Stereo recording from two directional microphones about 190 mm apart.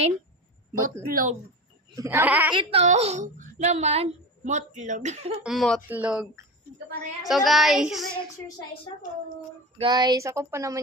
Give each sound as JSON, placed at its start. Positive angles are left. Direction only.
{"t": 1.0, "sound": "speech", "side_deg": -45}
{"t": 2.0, "sound": "speech", "side_deg": -10}
{"t": 2.5, "sound": "speech", "side_deg": -30}
{"t": 5.4, "sound": "speech", "side_deg": 0}
{"t": 9.7, "sound": "speech", "side_deg": -25}